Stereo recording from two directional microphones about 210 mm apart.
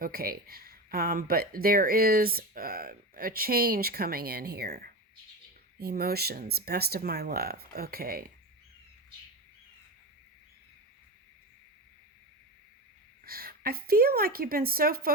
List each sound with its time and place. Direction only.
0.0 s speech: 45° right (ahead or behind)
13.2 s speech: 45° right (ahead or behind)